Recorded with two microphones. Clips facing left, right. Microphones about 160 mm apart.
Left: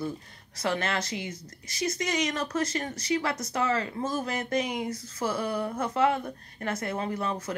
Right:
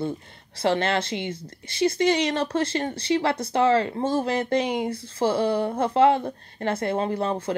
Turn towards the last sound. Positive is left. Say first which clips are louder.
# right 6 dB
turn(degrees=-30)  # may be behind; listen again after turning